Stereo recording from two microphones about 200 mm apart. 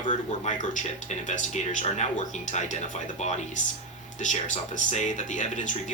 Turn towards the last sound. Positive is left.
turn(degrees=35)  # may be behind; listen again after turning